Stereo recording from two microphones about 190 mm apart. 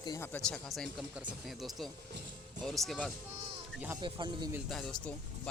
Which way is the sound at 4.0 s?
25° right (ahead or behind).